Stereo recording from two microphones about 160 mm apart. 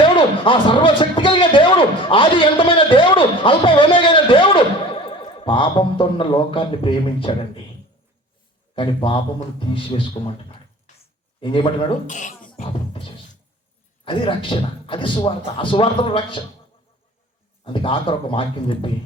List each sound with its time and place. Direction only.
0.0 s speech: 30° left (ahead or behind)
8.7 s speech: 30° left (ahead or behind)
12.0 s speech: 50° left (ahead or behind)
12.5 s music: 35° left (ahead or behind)
14.0 s speech: 35° left (ahead or behind)
17.7 s speech: 30° left (ahead or behind)